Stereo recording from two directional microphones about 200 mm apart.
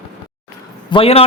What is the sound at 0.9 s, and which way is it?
Speech, 30° left (ahead or behind).